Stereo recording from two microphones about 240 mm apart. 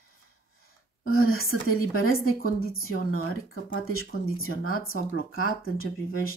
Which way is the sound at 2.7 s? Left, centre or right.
Left.